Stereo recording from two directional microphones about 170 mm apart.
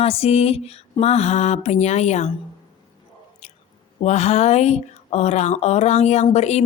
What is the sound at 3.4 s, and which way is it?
Chewing, 40° left (ahead or behind).